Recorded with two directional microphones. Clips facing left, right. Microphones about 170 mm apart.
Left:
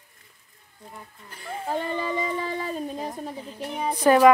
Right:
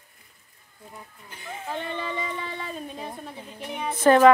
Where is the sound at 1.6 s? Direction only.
40° left (ahead or behind).